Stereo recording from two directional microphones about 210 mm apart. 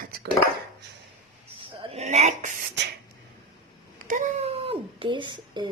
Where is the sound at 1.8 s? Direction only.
30° right (ahead or behind).